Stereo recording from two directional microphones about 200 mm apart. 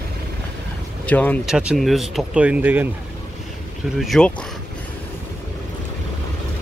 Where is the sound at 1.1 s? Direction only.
5° left (ahead or behind); by 2.8 s 10° right (ahead or behind).